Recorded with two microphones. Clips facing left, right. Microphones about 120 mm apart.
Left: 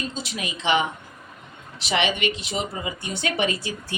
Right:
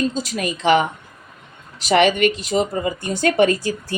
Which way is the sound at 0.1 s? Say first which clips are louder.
Right 7 dB; 40° right (ahead or behind).